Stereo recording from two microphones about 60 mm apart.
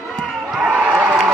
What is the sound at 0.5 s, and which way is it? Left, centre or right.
Speech, centre.